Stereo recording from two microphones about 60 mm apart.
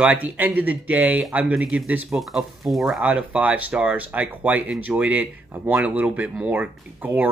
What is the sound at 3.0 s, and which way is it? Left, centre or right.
Speech, right.